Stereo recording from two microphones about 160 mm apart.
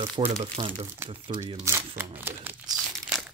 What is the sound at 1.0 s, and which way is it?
Speech, 15° right (ahead or behind).